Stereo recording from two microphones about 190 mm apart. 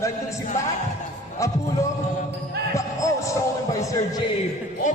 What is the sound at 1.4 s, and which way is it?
Music, 15° left (ahead or behind).